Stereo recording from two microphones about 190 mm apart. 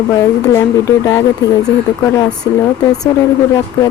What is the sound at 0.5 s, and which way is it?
Speech, 15° left (ahead or behind).